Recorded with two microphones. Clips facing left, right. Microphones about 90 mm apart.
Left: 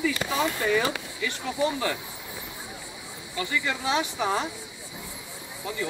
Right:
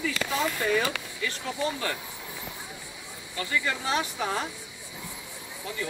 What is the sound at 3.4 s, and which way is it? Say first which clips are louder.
Speech: left 1 dB; 20° left (ahead or behind).